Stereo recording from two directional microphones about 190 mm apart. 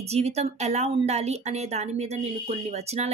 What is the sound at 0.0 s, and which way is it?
A woman's voice, 35° right (ahead or behind).